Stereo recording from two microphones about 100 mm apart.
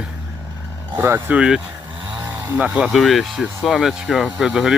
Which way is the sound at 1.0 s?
25° right (ahead or behind).